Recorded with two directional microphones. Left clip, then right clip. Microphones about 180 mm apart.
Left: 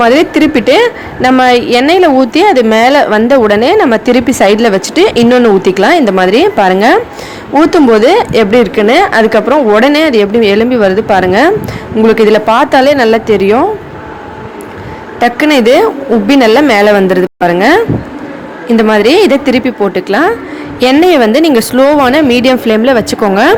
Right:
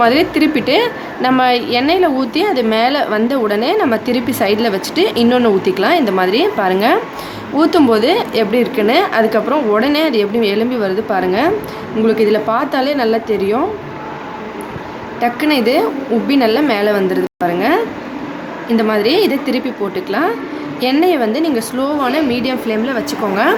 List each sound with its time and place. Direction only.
0.0 s a woman's voice: 35° left (ahead or behind)
15.2 s a woman's voice: 40° left (ahead or behind)